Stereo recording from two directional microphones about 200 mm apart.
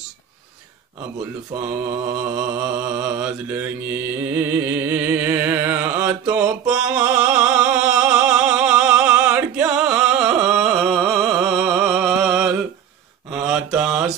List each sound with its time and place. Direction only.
2.1 s mantra: 5° right (ahead or behind)